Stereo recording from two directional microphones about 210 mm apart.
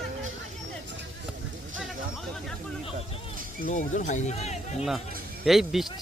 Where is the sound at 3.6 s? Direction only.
40° left (ahead or behind).